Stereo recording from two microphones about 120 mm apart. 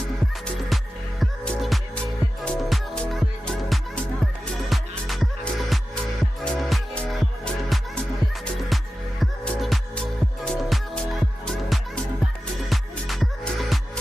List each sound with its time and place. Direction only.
1.2 s music: centre (ahead or behind)
9.4 s music: 5° left (ahead or behind)